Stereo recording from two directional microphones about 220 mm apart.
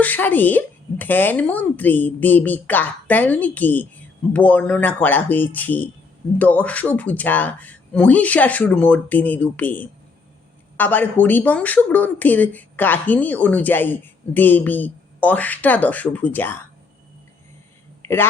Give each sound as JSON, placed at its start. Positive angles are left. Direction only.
{"t": 0.0, "sound": "speech", "side_deg": 10}